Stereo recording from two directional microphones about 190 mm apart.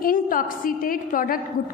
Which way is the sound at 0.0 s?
45° left (ahead or behind).